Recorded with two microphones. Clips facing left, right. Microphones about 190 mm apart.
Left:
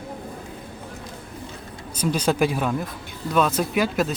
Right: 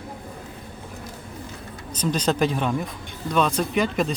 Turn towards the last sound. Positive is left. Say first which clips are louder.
# even
turn(degrees=5)  # may be behind; listen again after turning